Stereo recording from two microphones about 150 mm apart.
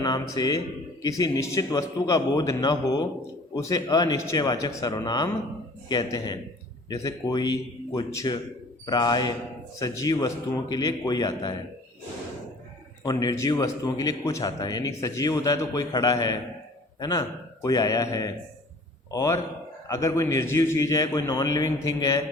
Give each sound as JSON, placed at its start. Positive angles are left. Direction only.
{"t": 0.0, "sound": "a man's voice", "side_deg": 30}
{"t": 13.0, "sound": "a man's voice", "side_deg": 25}